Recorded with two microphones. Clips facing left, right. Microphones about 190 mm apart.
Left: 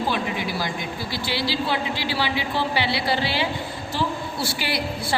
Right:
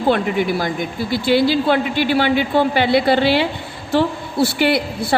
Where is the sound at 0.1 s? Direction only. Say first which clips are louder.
Right 9 dB; 55° right (ahead or behind).